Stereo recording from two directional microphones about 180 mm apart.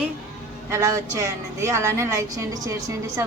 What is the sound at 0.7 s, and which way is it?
A woman's voice, 15° right (ahead or behind).